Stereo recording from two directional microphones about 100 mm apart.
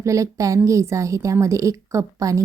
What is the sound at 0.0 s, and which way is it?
A woman's voice, 30° right (ahead or behind).